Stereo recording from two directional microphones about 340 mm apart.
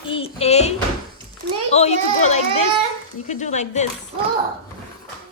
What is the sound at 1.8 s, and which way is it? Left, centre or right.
A woman's voice, centre.